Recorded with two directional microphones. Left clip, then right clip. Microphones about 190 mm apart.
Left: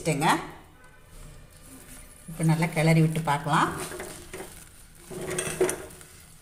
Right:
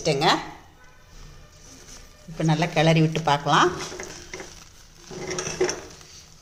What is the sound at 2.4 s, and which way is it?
A woman's voice, 40° right (ahead or behind).